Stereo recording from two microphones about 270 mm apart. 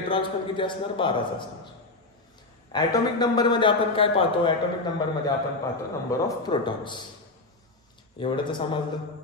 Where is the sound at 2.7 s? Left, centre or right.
Centre.